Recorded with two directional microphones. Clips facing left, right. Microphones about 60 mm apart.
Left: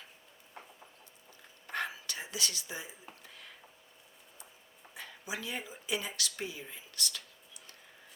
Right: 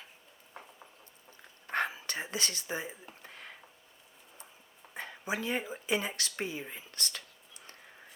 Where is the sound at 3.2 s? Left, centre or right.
Right.